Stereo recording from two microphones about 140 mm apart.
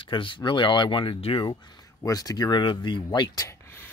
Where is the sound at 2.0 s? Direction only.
25° left (ahead or behind).